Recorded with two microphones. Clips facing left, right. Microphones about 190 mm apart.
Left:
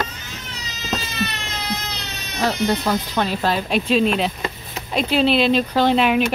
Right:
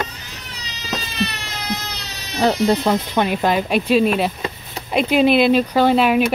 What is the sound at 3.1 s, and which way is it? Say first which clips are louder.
Speech: right 3 dB; 15° right (ahead or behind).